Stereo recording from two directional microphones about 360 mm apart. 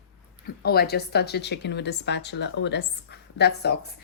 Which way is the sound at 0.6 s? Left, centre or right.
Left.